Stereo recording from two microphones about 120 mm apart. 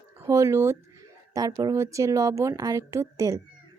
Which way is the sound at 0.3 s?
25° right (ahead or behind).